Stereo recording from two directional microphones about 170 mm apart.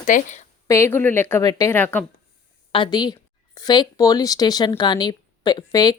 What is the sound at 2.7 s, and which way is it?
Speech, 25° left (ahead or behind).